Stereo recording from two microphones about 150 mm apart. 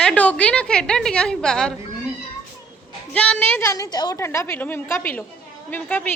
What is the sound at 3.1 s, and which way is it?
A woman's voice, 10° left (ahead or behind).